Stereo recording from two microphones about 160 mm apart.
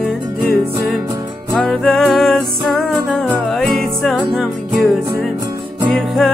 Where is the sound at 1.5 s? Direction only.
5° left (ahead or behind).